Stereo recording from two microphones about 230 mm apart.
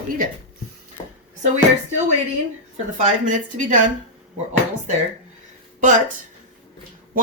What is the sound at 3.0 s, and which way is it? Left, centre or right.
Speech, right.